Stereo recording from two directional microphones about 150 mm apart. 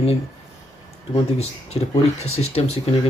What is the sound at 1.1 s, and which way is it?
Speech, 45° left (ahead or behind).